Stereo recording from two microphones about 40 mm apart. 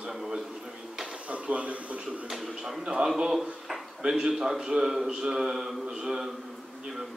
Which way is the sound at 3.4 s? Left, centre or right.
Centre.